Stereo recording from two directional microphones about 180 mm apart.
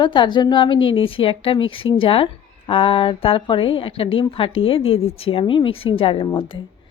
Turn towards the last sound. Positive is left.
turn(degrees=30)  # may be behind; listen again after turning